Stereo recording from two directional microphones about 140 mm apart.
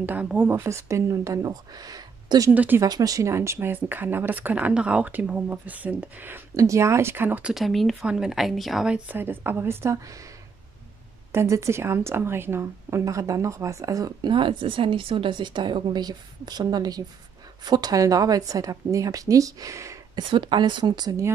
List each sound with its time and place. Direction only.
0.0 s a woman's voice: 10° right (ahead or behind); by 2.5 s 25° right (ahead or behind)
2.5 s speech: 10° right (ahead or behind)
2.8 s speech: 25° right (ahead or behind)
11.3 s a woman's voice: 20° right (ahead or behind)
20.2 s speech: 35° right (ahead or behind)